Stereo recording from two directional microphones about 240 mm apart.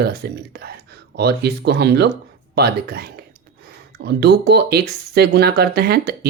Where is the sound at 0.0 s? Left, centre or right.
Right.